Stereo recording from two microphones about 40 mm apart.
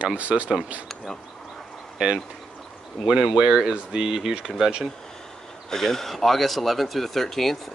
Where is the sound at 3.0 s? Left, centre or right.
Centre.